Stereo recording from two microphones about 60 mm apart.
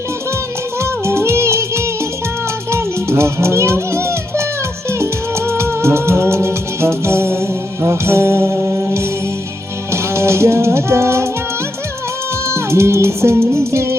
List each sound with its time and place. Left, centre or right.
0.8 s music: right
12.5 s music: right